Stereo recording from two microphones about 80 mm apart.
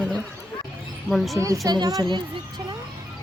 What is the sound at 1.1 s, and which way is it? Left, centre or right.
Speech, centre.